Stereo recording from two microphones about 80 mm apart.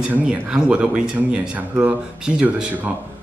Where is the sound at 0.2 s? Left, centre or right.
Centre.